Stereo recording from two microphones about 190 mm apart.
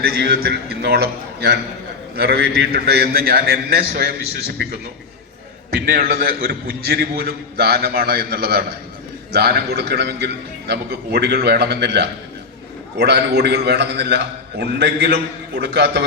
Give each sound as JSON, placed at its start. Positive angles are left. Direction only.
{"t": 0.2, "sound": "a man's voice", "side_deg": -55}